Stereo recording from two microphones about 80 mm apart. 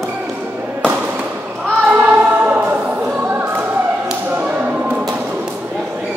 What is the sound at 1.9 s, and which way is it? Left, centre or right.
Choir, right.